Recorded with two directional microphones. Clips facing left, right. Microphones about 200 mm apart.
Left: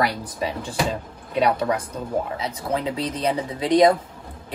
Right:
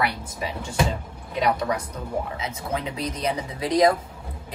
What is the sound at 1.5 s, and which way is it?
Speech, 30° left (ahead or behind).